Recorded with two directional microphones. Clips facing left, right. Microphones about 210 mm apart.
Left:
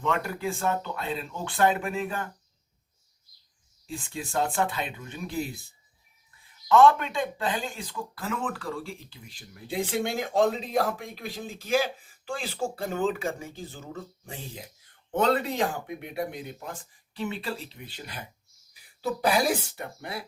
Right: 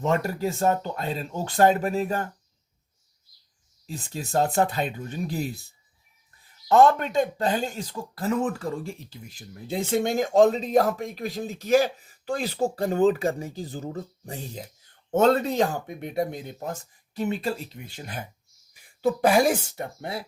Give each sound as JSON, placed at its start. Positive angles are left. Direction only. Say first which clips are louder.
{"t": 0.0, "sound": "speech", "louder": "right 4 dB", "side_deg": -40}
{"t": 3.8, "sound": "speech", "louder": "right 1 dB", "side_deg": -40}
{"t": 6.7, "sound": "speech", "louder": "right 1 dB", "side_deg": -40}